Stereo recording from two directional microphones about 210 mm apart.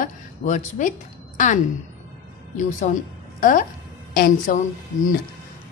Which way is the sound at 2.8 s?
35° left (ahead or behind).